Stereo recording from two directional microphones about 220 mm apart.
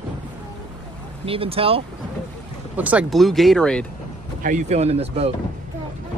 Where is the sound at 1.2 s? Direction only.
25° right (ahead or behind).